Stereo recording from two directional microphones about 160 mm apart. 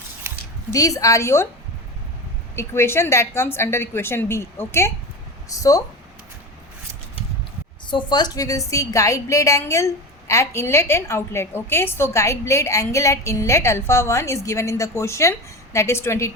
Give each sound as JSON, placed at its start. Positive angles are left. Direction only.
{"t": 0.7, "sound": "a woman's voice", "side_deg": 20}
{"t": 2.6, "sound": "a woman's voice", "side_deg": 15}
{"t": 7.9, "sound": "a woman's voice", "side_deg": 30}